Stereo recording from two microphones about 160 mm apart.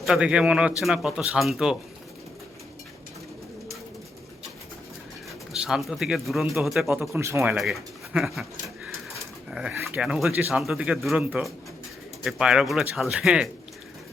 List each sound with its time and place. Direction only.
0.0 s speech: 5° right (ahead or behind)
5.5 s speech: 5° right (ahead or behind)
6.8 s speech: 15° right (ahead or behind)
7.6 s speech: centre (ahead or behind)